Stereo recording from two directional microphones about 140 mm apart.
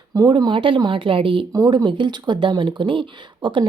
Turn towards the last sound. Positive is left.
turn(degrees=-35)  # may be behind; listen again after turning